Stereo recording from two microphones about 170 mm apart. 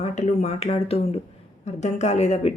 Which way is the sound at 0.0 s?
40° left (ahead or behind).